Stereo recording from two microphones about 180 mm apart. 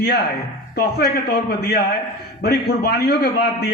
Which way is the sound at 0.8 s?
60° left (ahead or behind).